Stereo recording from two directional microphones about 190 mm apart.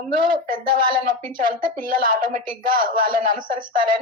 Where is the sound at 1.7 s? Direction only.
45° right (ahead or behind).